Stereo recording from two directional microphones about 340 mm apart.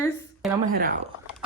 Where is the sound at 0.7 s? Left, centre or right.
Right.